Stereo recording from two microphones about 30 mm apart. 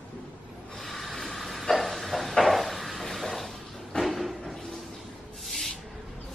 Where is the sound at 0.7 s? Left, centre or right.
Centre.